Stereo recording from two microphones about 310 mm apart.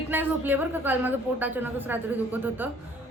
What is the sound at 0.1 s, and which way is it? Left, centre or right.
A man's voice, centre.